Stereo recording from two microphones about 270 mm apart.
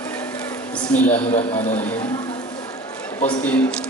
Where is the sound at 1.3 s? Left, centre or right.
Left.